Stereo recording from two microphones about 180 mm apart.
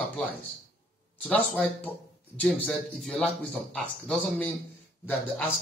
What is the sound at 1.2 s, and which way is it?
Speech, 10° left (ahead or behind).